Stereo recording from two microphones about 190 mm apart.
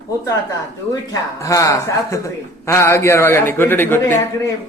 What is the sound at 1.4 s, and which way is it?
A man's voice, 15° left (ahead or behind).